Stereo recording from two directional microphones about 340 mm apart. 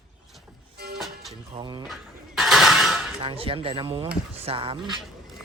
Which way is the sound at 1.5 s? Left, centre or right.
Centre.